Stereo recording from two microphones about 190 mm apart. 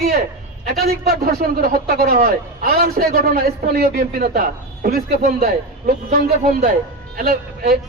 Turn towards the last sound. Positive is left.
turn(degrees=-50)  # may be behind; listen again after turning